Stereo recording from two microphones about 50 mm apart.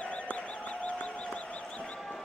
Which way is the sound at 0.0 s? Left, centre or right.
Left.